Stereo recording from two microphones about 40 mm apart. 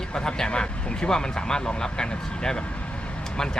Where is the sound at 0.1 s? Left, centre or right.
Left.